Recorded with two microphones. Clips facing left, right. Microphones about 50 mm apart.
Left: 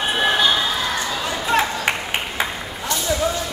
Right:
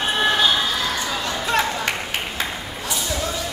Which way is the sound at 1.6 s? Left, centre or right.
Left.